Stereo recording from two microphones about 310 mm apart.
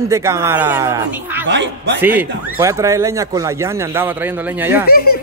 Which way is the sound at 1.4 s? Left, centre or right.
Right.